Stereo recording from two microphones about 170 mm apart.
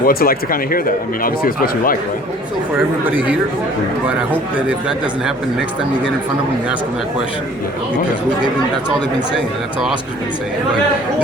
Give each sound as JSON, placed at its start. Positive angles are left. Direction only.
{"t": 0.0, "sound": "speech", "side_deg": 60}
{"t": 3.1, "sound": "speech", "side_deg": -10}